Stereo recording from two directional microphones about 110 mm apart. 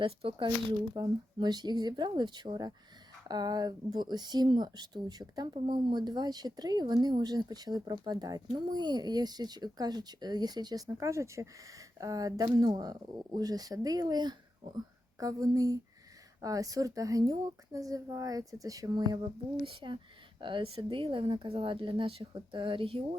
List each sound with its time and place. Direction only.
0.0 s speech: 55° right (ahead or behind)
0.9 s speech: 35° right (ahead or behind)
10.8 s speech: 25° right (ahead or behind)
19.6 s speech: 45° right (ahead or behind)